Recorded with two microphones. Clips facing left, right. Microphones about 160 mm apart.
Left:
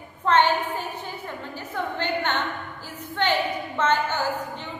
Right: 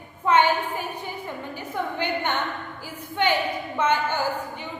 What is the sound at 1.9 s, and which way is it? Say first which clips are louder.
A woman's voice: left 1 dB; 10° right (ahead or behind).